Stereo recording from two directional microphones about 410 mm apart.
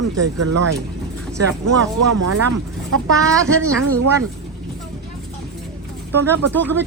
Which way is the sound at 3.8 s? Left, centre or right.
Right.